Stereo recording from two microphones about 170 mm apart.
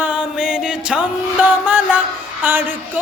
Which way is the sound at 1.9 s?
10° right (ahead or behind).